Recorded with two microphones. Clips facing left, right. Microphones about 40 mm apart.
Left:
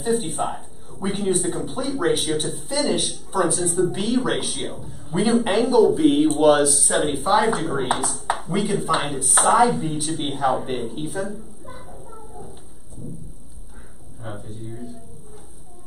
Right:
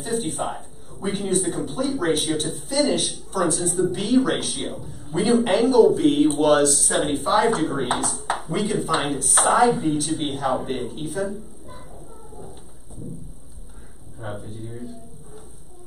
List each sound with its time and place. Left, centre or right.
0.0 s speech: centre
11.9 s a sound: centre
14.2 s speech: centre